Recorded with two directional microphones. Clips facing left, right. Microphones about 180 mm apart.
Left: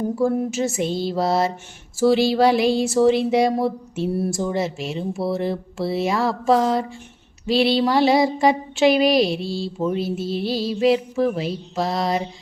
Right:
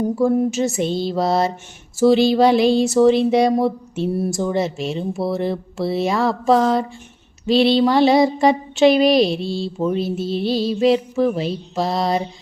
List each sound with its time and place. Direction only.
0.2 s speech: 25° right (ahead or behind)